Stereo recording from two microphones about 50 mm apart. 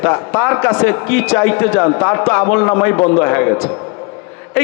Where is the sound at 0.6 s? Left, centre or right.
Left.